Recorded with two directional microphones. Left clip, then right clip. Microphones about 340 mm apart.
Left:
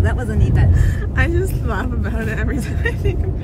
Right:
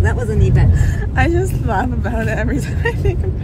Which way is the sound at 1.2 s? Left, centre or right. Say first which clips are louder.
Right 4 dB; centre.